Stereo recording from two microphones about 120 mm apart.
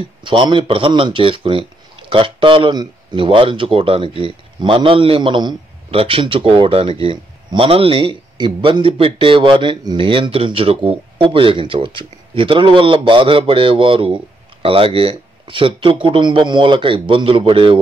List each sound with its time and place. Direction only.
0.2 s a man's voice: 45° right (ahead or behind)